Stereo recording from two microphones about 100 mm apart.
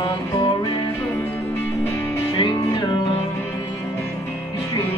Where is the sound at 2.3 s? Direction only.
50° left (ahead or behind).